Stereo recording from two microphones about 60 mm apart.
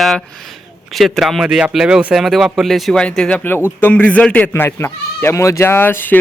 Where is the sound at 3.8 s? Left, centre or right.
Left.